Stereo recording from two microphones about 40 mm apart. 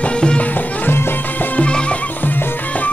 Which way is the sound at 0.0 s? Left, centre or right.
Left.